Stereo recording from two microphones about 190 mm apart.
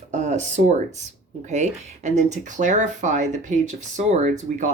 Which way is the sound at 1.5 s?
40° right (ahead or behind).